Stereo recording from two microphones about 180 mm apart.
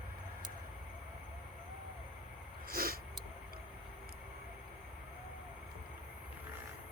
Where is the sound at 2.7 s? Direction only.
55° right (ahead or behind).